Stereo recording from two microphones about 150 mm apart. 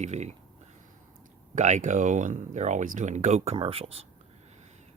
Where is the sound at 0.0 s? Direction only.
50° right (ahead or behind).